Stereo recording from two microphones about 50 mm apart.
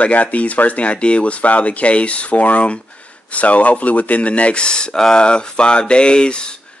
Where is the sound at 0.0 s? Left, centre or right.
Left.